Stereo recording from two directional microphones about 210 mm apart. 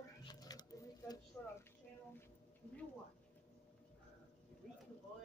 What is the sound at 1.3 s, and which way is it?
Speech, 5° left (ahead or behind).